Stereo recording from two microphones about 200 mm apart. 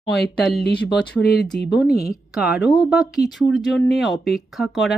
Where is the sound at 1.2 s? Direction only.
55° left (ahead or behind).